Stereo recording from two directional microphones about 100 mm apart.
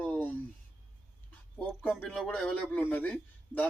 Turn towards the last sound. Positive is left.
turn(degrees=15)  # may be behind; listen again after turning